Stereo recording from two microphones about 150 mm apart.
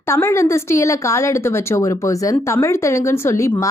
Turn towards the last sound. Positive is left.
turn(degrees=20)  # may be behind; listen again after turning